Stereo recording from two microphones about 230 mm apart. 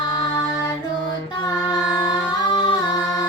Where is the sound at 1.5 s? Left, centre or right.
Centre.